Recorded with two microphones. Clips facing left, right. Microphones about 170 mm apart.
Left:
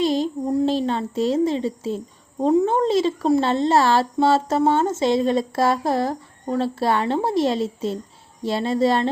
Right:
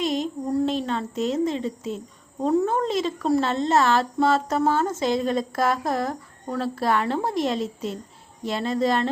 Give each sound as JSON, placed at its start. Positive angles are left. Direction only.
{"t": 0.0, "sound": "a child's voice", "side_deg": 30}